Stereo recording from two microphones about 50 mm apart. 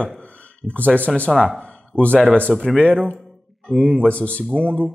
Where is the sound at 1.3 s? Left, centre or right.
Centre.